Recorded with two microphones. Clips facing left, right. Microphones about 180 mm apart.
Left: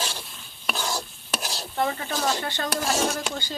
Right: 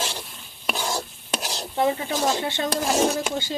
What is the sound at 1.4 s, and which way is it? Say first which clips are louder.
Speech: right 3 dB; 15° right (ahead or behind).